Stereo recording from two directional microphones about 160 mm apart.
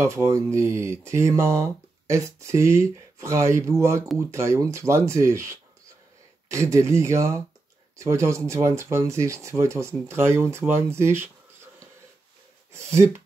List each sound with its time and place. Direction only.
0.0 s speech: 20° right (ahead or behind)
12.7 s speech: 15° right (ahead or behind)